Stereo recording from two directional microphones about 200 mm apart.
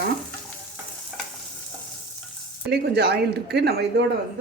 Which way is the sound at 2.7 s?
55° right (ahead or behind).